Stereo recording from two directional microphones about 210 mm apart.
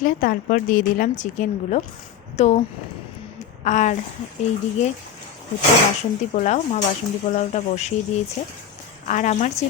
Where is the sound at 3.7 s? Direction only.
35° left (ahead or behind).